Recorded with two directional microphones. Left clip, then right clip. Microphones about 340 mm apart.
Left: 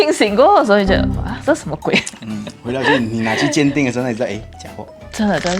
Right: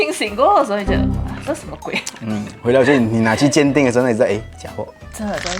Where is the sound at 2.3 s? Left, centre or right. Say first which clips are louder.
Right 8 dB; right.